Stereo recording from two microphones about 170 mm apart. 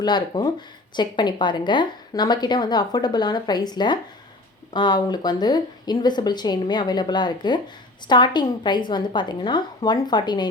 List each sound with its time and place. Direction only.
0.0 s a woman's voice: 25° left (ahead or behind)